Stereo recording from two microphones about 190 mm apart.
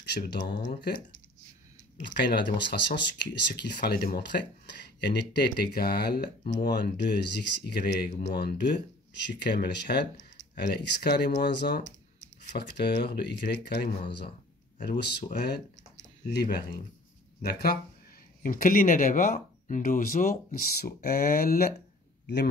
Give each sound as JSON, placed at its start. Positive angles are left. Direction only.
{"t": 0.0, "sound": "speech", "side_deg": 60}
{"t": 2.1, "sound": "speech", "side_deg": 65}
{"t": 11.8, "sound": "a sound", "side_deg": 40}
{"t": 12.5, "sound": "speech", "side_deg": 60}